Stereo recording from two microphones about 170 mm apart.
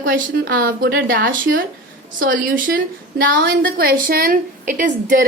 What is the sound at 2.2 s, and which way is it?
A woman's voice, 55° right (ahead or behind).